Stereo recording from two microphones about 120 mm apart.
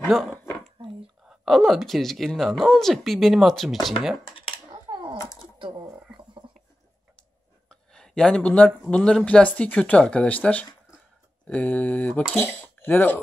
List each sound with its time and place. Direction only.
1.3 s speech: centre (ahead or behind)
5.1 s a sound: 30° left (ahead or behind)
7.9 s speech: 5° left (ahead or behind)